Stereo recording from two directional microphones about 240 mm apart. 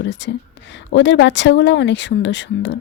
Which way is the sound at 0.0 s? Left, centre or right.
Left.